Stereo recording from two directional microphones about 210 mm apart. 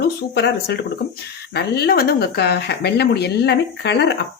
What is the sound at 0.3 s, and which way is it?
Speech, 50° left (ahead or behind).